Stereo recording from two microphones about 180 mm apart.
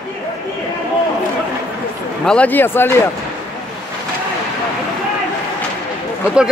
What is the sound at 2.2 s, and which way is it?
Speech, 5° left (ahead or behind).